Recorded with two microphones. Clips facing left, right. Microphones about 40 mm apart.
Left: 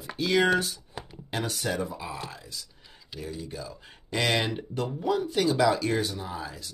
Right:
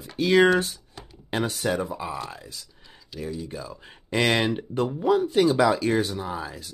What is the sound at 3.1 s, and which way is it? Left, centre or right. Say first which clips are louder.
Speech: right 4 dB; centre.